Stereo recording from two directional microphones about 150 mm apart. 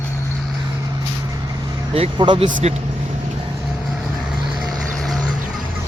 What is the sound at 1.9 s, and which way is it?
Speech, 35° right (ahead or behind).